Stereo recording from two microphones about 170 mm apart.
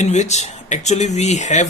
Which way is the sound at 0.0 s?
40° left (ahead or behind).